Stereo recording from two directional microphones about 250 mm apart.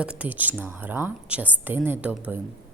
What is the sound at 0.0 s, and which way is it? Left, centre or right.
A woman's voice, centre.